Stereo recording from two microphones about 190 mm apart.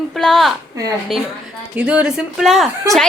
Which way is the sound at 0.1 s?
Centre (ahead or behind).